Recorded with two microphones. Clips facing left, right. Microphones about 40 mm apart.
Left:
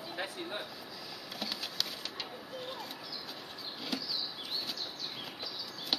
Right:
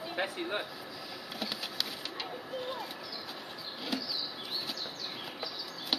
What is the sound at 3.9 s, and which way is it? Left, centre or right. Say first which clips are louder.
Bird flight: right 2 dB; centre.